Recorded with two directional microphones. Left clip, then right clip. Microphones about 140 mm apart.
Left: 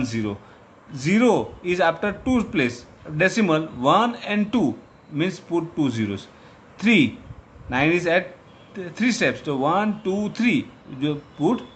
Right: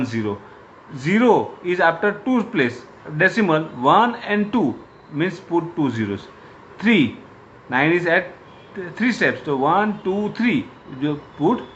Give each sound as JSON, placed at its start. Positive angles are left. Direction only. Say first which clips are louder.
{"t": 0.0, "sound": "speech", "louder": "right 3 dB", "side_deg": 75}
{"t": 0.9, "sound": "speech", "louder": "right 3 dB", "side_deg": 90}
{"t": 7.7, "sound": "speech", "louder": "right 2 dB", "side_deg": 75}